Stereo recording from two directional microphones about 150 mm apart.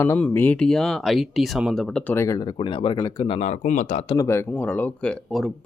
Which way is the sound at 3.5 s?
55° left (ahead or behind).